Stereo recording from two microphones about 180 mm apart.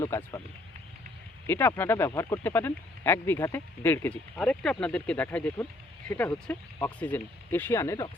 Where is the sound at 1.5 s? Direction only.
10° left (ahead or behind).